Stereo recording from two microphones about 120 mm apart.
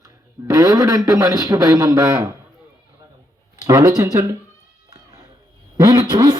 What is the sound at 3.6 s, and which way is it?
Speech, 30° right (ahead or behind).